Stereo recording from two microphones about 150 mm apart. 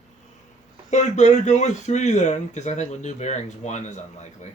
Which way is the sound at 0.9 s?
50° left (ahead or behind).